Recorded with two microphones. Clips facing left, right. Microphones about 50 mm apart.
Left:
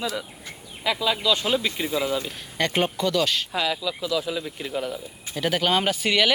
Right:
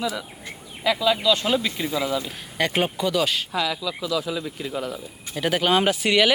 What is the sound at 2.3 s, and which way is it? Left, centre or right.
A man's voice, centre.